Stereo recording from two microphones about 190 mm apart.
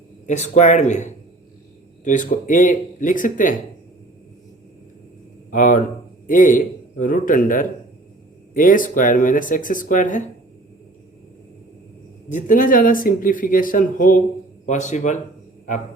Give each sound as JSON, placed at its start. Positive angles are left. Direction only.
{"t": 0.3, "sound": "speech", "side_deg": 40}
{"t": 5.5, "sound": "a man's voice", "side_deg": 45}
{"t": 12.3, "sound": "speech", "side_deg": 45}